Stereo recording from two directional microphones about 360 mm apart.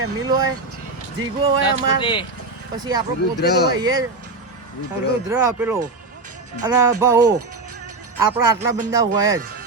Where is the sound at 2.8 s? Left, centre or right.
Centre.